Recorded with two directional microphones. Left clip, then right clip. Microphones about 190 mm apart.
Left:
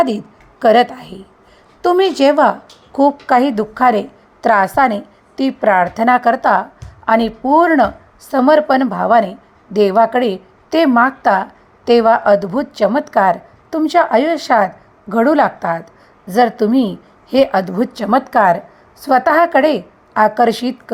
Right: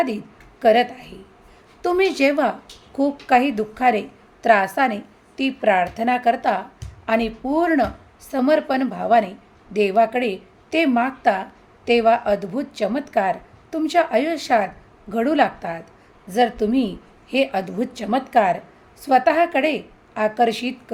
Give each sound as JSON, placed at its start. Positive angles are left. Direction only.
{"t": 0.6, "sound": "a woman's voice", "side_deg": 30}